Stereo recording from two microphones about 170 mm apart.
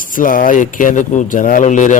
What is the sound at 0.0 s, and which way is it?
A man's voice, 55° left (ahead or behind).